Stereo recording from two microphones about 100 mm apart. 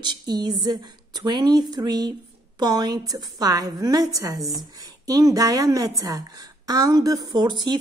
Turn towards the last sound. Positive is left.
turn(degrees=-45)  # may be behind; listen again after turning